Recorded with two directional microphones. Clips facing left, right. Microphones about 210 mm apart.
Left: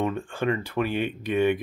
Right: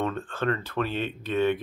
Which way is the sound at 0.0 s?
10° left (ahead or behind).